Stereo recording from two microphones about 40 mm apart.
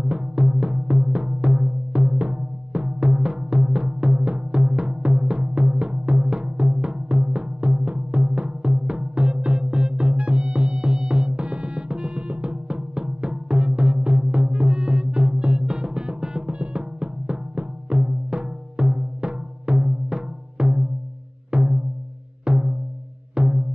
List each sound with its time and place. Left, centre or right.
0.0 s music: centre